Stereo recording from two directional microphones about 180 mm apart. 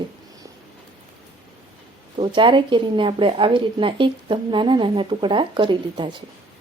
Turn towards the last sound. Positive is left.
turn(degrees=-25)  # may be behind; listen again after turning